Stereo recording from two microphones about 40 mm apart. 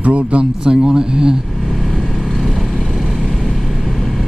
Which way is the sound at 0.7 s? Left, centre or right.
Centre.